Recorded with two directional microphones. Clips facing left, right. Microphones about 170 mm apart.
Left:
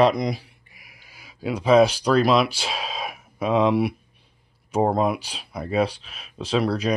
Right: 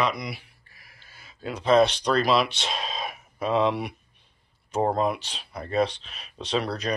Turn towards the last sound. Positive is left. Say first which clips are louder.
# left 5 dB
turn(degrees=5)  # may be behind; listen again after turning